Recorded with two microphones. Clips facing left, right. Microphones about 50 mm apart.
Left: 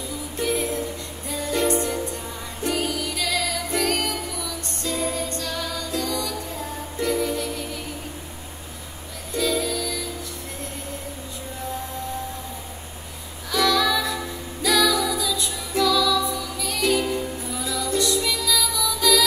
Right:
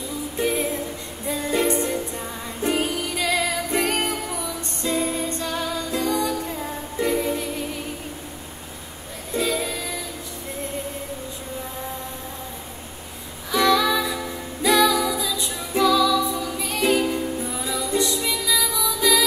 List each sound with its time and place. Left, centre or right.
0.4 s music: right
9.3 s music: right
13.5 s music: right